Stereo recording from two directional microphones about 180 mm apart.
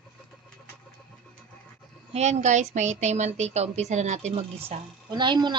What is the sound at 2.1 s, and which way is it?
A woman's voice, 40° right (ahead or behind).